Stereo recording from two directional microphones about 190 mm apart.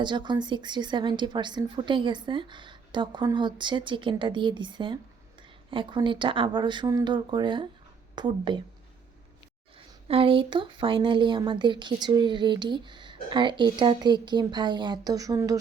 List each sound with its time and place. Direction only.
0.0 s a woman's voice: 25° right (ahead or behind)
9.7 s a woman's voice: 30° right (ahead or behind)